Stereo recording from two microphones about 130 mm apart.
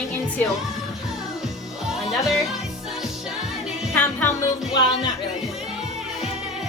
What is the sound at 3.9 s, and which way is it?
Music, 15° left (ahead or behind).